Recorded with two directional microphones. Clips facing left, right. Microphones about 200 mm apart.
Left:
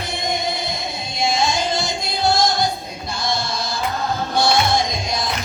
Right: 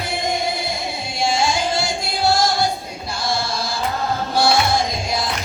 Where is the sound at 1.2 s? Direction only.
10° right (ahead or behind).